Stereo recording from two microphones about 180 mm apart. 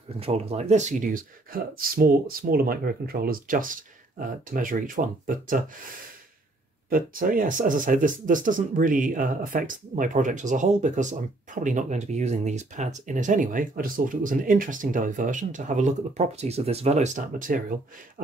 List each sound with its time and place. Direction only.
0.2 s speech: 35° right (ahead or behind)
6.9 s speech: 50° right (ahead or behind)